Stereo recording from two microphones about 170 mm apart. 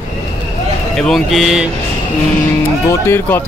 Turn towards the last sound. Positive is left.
turn(degrees=15)  # may be behind; listen again after turning